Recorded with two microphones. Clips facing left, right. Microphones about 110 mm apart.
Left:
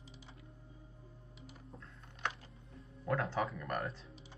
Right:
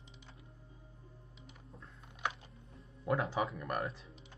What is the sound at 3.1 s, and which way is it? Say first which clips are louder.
Music: right 2 dB; 10° right (ahead or behind).